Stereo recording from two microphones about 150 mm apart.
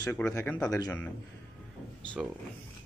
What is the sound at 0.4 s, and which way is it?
Speech, 10° left (ahead or behind).